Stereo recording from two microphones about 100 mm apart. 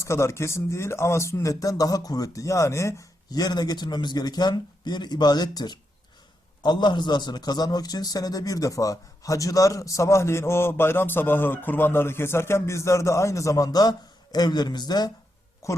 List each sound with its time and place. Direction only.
0.0 s a man's voice: 30° left (ahead or behind)
15.6 s a man's voice: 30° left (ahead or behind)